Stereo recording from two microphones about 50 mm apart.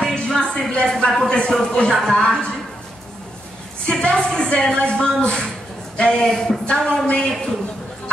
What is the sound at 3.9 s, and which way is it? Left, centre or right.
A woman's voice, centre.